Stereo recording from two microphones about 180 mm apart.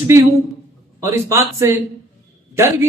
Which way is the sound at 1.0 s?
15° right (ahead or behind).